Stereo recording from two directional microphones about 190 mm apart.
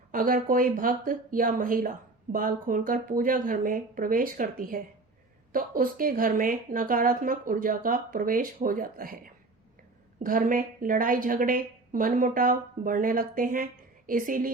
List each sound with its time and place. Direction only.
0.1 s speech: 45° right (ahead or behind)